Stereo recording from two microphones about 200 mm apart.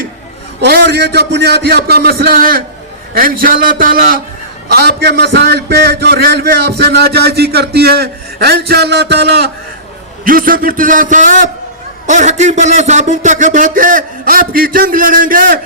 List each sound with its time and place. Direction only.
0.6 s a man's voice: 55° right (ahead or behind)
10.2 s a man's voice: 45° right (ahead or behind)